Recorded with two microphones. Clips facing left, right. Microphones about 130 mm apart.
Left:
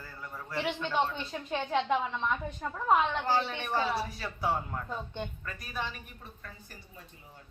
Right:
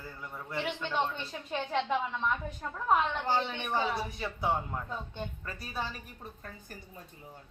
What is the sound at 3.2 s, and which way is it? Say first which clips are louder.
Speech: left 1 dB; 20° right (ahead or behind).